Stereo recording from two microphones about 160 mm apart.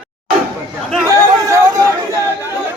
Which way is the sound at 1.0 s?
20° right (ahead or behind).